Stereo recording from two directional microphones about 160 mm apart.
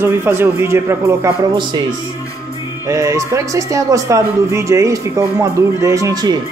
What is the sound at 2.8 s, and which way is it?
Speech, 20° right (ahead or behind).